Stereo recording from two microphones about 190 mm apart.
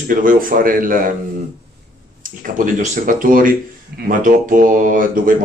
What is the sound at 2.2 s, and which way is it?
A man's voice, 45° right (ahead or behind).